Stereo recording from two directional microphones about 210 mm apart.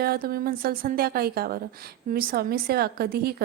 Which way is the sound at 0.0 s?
45° right (ahead or behind).